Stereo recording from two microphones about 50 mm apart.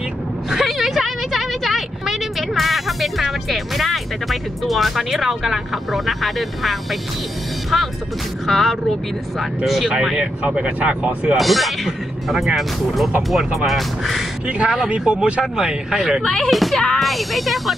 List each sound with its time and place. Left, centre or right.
0.5 s a sound: centre
7.7 s speech: centre
10.4 s speech: centre
11.3 s speech: centre
14.7 s speech: centre
16.3 s speech: centre